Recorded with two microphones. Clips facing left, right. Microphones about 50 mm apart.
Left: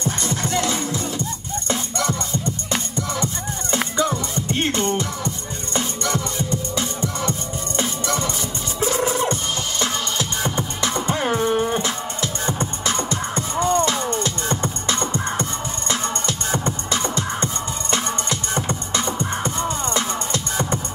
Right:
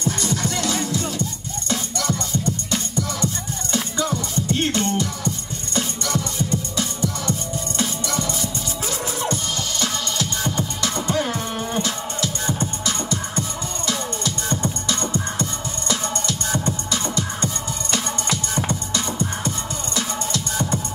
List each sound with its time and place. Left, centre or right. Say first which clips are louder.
0.0 s music: right 1 dB; left